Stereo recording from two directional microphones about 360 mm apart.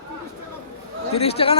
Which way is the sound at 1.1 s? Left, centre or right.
Centre.